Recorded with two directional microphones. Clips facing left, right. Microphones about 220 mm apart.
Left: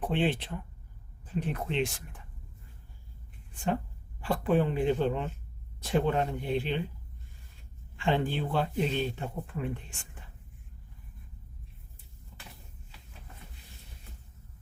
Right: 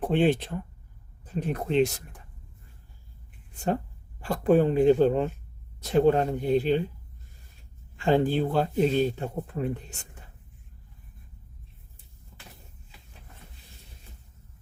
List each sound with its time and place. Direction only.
0.1 s speech: 45° right (ahead or behind)
3.5 s speech: 40° right (ahead or behind)
7.9 s speech: 40° right (ahead or behind)